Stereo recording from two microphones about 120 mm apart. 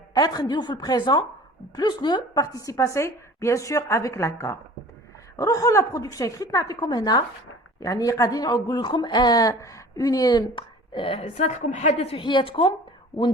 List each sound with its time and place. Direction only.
0.1 s a woman's voice: 35° left (ahead or behind); by 11.3 s 50° left (ahead or behind)
11.3 s a woman's voice: 75° left (ahead or behind); by 12.7 s 45° left (ahead or behind)